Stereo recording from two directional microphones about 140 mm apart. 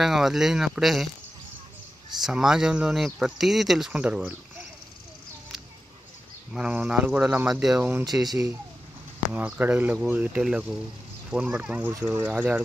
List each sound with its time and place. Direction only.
0.0 s speech: centre (ahead or behind)
2.2 s speech: 5° right (ahead or behind)
6.5 s speech: 5° right (ahead or behind)
8.0 s speech: 25° right (ahead or behind)
9.3 s speech: 10° right (ahead or behind)